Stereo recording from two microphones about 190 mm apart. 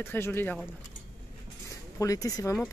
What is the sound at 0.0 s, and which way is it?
Speech, 10° left (ahead or behind).